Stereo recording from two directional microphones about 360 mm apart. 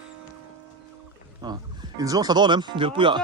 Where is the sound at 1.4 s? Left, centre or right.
Centre.